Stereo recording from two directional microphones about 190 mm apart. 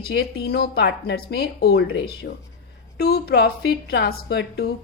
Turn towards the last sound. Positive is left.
turn(degrees=55)  # may be behind; listen again after turning